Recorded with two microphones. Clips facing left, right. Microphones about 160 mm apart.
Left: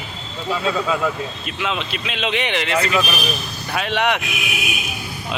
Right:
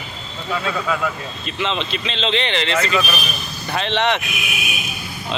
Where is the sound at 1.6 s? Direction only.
5° left (ahead or behind).